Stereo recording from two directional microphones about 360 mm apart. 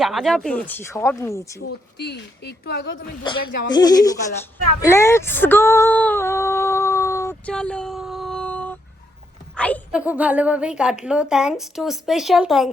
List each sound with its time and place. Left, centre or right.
0.0 s speech: centre
2.0 s speech: left
3.2 s speech: centre
4.8 s female singing: centre
9.6 s a woman's voice: centre